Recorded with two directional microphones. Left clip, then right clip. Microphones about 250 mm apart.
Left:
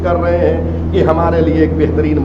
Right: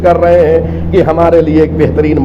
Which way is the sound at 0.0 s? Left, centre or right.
Right.